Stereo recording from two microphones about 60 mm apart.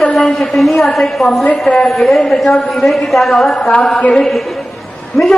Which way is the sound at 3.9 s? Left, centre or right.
Centre.